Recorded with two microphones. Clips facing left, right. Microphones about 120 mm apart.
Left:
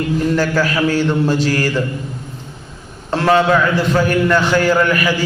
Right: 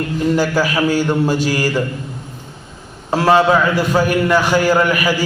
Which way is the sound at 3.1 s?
10° right (ahead or behind).